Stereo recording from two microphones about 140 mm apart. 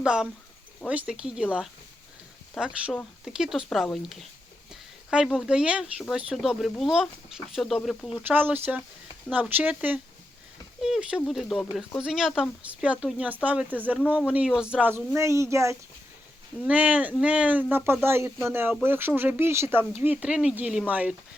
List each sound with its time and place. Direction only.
0.0 s speech: 5° right (ahead or behind)
8.2 s speech: 15° right (ahead or behind)